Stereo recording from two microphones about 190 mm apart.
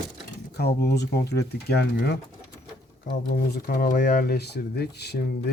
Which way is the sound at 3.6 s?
50° left (ahead or behind).